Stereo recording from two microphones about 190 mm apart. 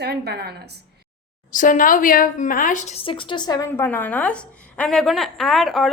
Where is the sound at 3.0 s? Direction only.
25° left (ahead or behind); by 5.9 s centre (ahead or behind).